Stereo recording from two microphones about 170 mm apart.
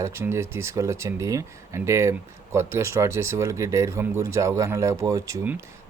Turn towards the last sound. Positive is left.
turn(degrees=-15)  # may be behind; listen again after turning